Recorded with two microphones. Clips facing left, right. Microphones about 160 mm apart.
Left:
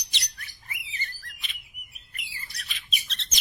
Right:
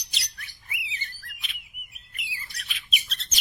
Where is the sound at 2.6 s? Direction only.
5° right (ahead or behind).